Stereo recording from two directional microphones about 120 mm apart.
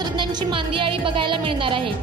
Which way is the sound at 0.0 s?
40° right (ahead or behind).